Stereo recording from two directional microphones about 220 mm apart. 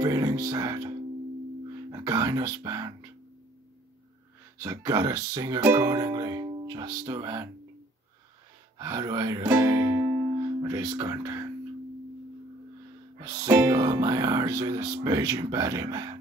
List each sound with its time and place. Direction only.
0.0 s speech: 15° right (ahead or behind)
4.6 s speech: 15° right (ahead or behind)
8.7 s speech: 15° right (ahead or behind)
13.2 s speech: 10° right (ahead or behind)